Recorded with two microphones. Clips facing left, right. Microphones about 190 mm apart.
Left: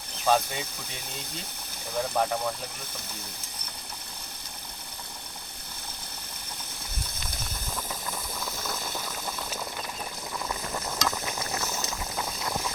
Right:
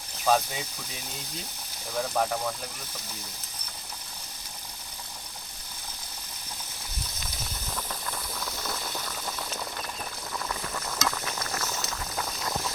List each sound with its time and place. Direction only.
0.3 s speech: 5° right (ahead or behind)
2.0 s speech: centre (ahead or behind)
8.4 s boiling: 5° left (ahead or behind)
10.5 s a sound: 20° left (ahead or behind)